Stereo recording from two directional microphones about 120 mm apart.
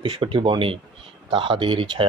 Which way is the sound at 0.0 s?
45° right (ahead or behind).